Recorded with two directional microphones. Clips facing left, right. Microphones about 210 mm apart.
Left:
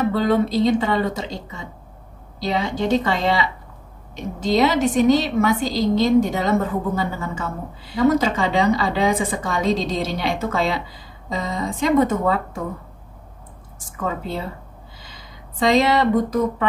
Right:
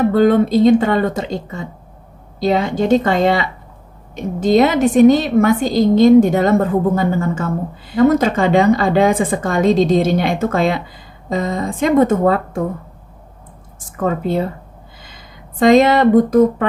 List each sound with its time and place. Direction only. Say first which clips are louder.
0.0 s a woman's voice: right 6 dB; 50° right (ahead or behind)
13.9 s a woman's voice: right 8 dB; 50° right (ahead or behind)